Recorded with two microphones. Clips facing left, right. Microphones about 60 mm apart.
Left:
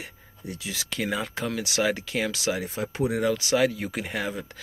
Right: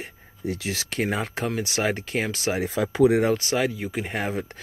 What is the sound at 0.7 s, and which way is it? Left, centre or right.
Speech, right.